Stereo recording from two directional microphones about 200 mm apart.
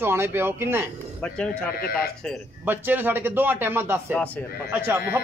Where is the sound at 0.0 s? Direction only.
10° right (ahead or behind).